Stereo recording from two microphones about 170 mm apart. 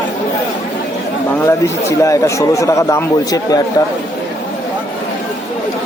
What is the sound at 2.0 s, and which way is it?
Speech, 20° left (ahead or behind).